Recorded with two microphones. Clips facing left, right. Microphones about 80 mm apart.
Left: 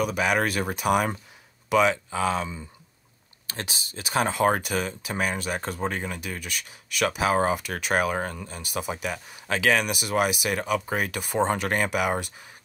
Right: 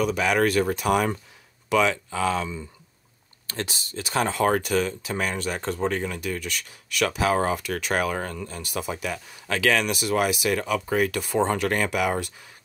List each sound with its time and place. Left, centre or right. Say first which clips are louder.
0.0 s speech: right 2 dB; centre